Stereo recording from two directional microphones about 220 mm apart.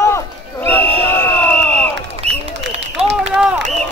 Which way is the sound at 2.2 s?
30° right (ahead or behind).